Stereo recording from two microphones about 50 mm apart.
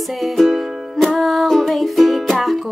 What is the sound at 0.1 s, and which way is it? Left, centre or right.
Music, centre.